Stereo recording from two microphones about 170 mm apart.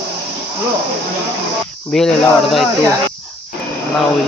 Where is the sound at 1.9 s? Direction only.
Centre (ahead or behind).